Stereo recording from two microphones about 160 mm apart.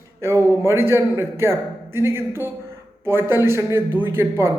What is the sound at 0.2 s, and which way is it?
A man's voice, 15° right (ahead or behind).